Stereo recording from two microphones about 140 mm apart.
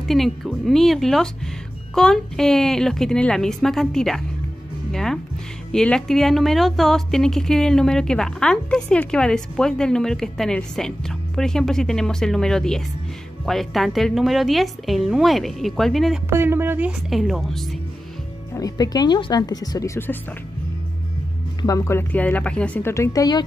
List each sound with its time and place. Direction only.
0.1 s speech: centre (ahead or behind)
16.3 s speech: 15° right (ahead or behind)
17.1 s speech: centre (ahead or behind)
18.5 s speech: 25° left (ahead or behind)
21.6 s a woman's voice: 20° left (ahead or behind)